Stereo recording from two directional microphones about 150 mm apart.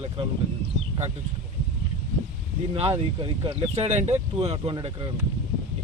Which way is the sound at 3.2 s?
40° right (ahead or behind).